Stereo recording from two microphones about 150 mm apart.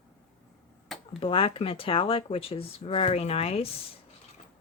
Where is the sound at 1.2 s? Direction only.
35° left (ahead or behind).